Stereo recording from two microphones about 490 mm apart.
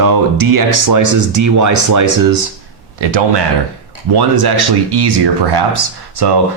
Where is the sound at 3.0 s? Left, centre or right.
Right.